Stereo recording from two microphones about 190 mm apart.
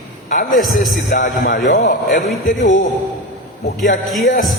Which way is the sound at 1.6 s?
55° left (ahead or behind).